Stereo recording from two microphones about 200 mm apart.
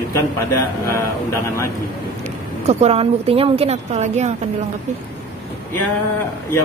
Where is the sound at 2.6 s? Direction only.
30° right (ahead or behind).